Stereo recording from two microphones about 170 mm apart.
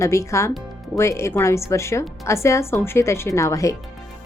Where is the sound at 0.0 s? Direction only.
15° left (ahead or behind).